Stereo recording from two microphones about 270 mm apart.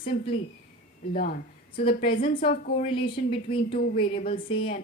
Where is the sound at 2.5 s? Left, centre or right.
Left.